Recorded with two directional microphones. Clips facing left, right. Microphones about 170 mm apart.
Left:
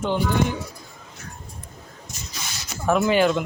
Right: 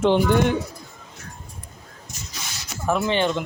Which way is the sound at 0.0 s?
80° right.